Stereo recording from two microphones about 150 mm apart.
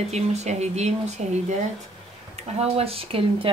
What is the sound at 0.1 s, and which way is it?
Speech, 45° right (ahead or behind).